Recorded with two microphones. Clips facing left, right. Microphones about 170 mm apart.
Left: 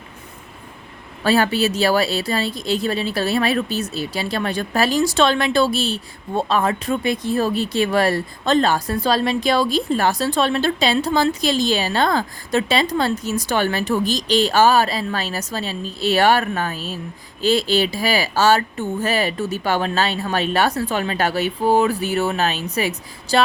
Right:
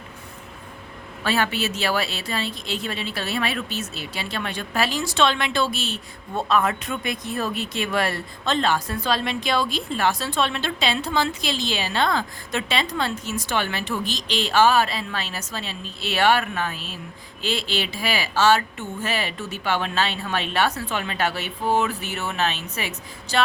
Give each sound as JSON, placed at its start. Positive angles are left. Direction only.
{"t": 1.2, "sound": "speech", "side_deg": 35}